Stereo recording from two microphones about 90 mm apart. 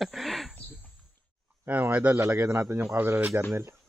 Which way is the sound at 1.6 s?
20° right (ahead or behind).